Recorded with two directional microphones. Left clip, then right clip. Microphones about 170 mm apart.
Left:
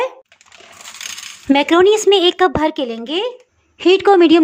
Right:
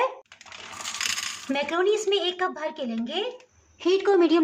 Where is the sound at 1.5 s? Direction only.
65° left (ahead or behind).